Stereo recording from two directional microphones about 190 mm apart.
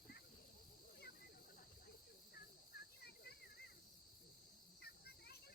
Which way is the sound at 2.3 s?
55° left (ahead or behind).